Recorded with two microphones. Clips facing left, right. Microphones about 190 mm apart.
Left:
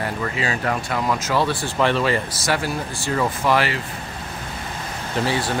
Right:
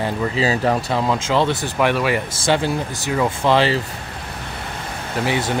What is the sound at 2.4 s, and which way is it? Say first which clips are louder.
Speech: right 4 dB; 25° right (ahead or behind).